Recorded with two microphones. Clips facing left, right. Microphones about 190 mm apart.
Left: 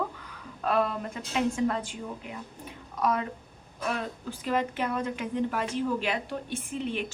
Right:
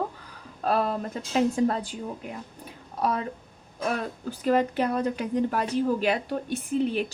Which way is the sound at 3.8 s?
40° right (ahead or behind).